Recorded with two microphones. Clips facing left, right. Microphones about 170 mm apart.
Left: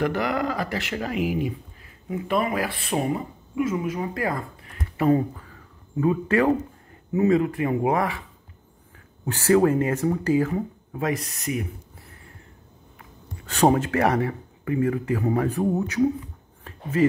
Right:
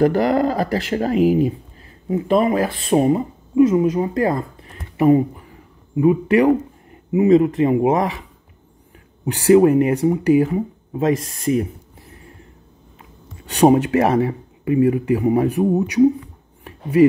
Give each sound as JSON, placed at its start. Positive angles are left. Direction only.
{"t": 0.0, "sound": "speech", "side_deg": -35}
{"t": 9.2, "sound": "speech", "side_deg": -15}
{"t": 12.1, "sound": "vehicle", "side_deg": -20}
{"t": 13.4, "sound": "speech", "side_deg": -15}